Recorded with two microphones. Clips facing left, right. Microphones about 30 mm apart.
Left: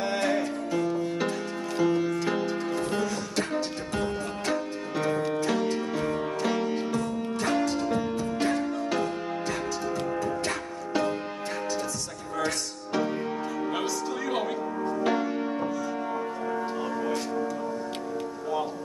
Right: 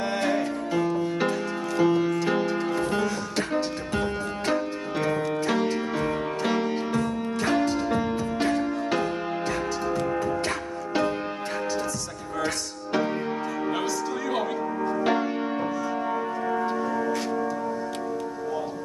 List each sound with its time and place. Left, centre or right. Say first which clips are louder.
0.3 s music: right 2 dB; right
6.9 s music: right 2 dB; right
8.5 s music: right 2 dB; right
10.1 s music: right 3 dB; right
15.0 s music: right 1 dB; right